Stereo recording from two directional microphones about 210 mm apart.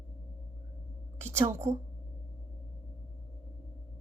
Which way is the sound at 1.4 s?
30° right (ahead or behind).